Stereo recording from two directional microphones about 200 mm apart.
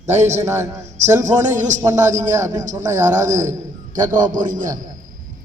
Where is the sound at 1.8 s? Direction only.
15° right (ahead or behind).